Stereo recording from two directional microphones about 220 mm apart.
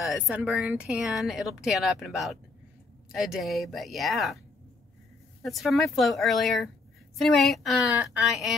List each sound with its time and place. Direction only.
0.0 s speech: 5° right (ahead or behind)
5.4 s speech: centre (ahead or behind)